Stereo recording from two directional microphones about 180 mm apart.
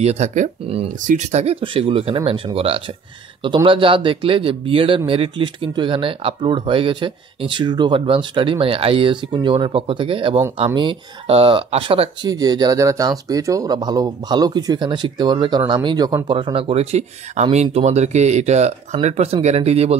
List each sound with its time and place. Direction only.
0.0 s speech: 40° right (ahead or behind)